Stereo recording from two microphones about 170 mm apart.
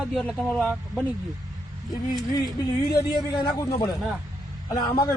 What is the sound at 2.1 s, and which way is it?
A man's voice, 25° left (ahead or behind).